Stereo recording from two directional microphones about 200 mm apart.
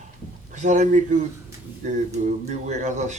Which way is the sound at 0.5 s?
35° right (ahead or behind).